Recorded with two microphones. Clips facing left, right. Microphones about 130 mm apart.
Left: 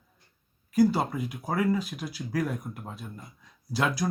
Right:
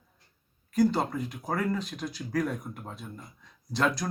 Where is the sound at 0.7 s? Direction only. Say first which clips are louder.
Left 2 dB; 5° left (ahead or behind).